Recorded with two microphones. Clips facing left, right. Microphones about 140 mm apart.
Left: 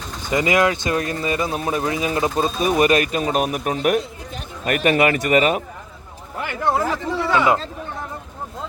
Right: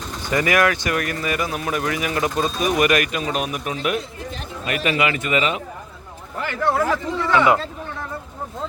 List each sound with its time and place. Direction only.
0.3 s a man's voice: 20° left (ahead or behind); by 5.6 s 45° left (ahead or behind)
6.4 s speech: 20° left (ahead or behind)